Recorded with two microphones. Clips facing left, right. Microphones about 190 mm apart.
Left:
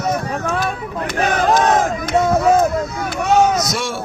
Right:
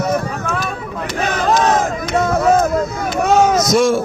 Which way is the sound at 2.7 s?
45° right (ahead or behind).